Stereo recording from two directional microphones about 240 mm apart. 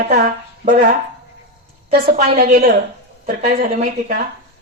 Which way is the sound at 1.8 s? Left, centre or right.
Right.